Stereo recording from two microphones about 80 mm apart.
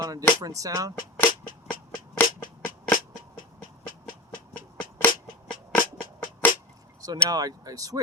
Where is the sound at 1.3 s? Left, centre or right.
Left.